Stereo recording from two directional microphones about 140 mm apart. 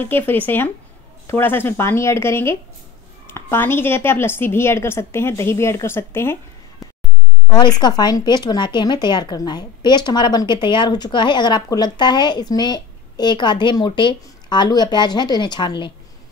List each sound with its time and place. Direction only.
0.0 s a woman's voice: 15° left (ahead or behind)
7.5 s speech: 30° left (ahead or behind)